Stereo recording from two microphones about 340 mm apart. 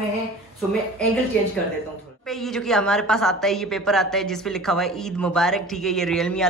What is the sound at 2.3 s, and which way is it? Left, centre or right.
A woman's voice, centre.